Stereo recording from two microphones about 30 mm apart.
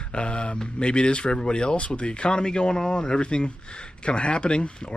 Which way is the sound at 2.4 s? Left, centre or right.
Left.